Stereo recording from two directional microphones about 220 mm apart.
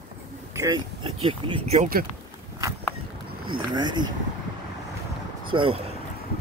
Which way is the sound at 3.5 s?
20° right (ahead or behind).